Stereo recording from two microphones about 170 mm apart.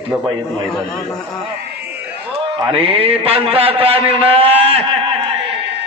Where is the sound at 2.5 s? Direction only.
30° right (ahead or behind).